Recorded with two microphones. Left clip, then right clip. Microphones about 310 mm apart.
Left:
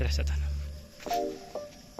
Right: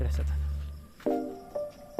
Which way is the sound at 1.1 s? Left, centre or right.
Centre.